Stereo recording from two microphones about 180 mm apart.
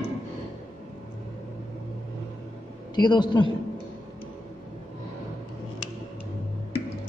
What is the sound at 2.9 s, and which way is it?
Speech, 25° left (ahead or behind).